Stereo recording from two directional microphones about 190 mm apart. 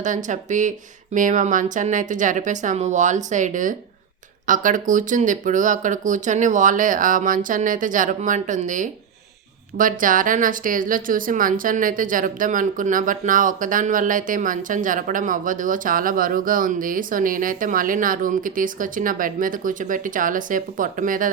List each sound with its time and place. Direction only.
0.0 s a woman's voice: 40° right (ahead or behind)